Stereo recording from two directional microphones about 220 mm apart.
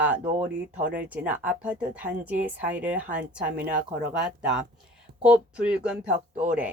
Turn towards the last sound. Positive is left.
turn(degrees=-35)  # may be behind; listen again after turning